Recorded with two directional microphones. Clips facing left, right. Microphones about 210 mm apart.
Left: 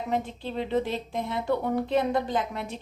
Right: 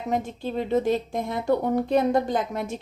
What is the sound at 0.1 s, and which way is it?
A woman's voice, 45° right (ahead or behind).